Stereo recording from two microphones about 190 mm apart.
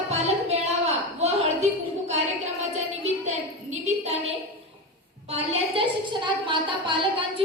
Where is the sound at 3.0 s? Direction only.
35° right (ahead or behind).